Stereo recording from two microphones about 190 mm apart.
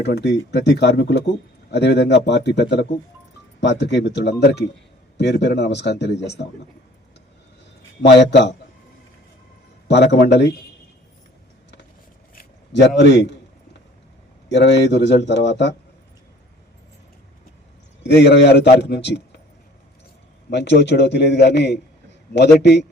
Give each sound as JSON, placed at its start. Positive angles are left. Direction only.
{"t": 0.0, "sound": "a man's voice", "side_deg": 65}
{"t": 8.0, "sound": "a man's voice", "side_deg": 65}
{"t": 9.9, "sound": "a man's voice", "side_deg": 60}
{"t": 12.3, "sound": "a sound", "side_deg": 50}
{"t": 13.0, "sound": "a man's voice", "side_deg": 65}
{"t": 14.5, "sound": "a man's voice", "side_deg": 65}
{"t": 18.0, "sound": "a man's voice", "side_deg": 60}
{"t": 20.5, "sound": "a man's voice", "side_deg": 65}